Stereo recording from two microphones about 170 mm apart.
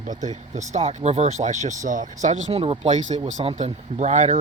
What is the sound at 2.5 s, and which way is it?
Speech, 30° right (ahead or behind).